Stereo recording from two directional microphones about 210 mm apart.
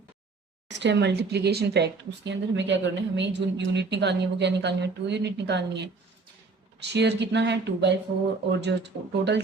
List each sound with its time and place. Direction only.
0.7 s speech: 55° right (ahead or behind)